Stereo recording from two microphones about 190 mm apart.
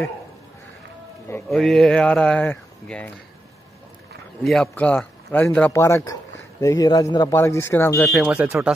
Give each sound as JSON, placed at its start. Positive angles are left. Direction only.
{"t": 1.5, "sound": "speech", "side_deg": 0}
{"t": 4.4, "sound": "a man's voice", "side_deg": 5}
{"t": 8.1, "sound": "speech", "side_deg": -5}